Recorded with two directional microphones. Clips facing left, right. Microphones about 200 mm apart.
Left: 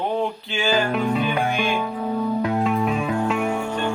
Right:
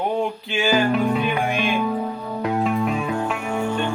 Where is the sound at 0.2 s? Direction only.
15° right (ahead or behind).